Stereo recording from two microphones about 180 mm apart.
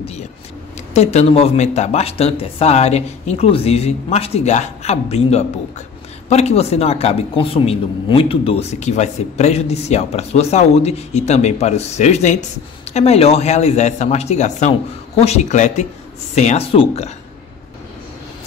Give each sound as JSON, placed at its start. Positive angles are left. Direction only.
{"t": 0.9, "sound": "speech", "side_deg": 35}